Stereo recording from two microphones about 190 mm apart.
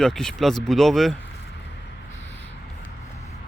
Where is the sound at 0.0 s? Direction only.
5° left (ahead or behind).